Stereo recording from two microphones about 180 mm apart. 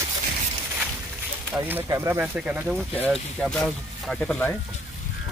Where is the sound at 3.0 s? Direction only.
5° left (ahead or behind).